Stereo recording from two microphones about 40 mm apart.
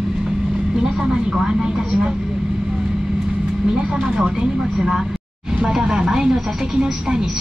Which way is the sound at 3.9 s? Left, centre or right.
Centre.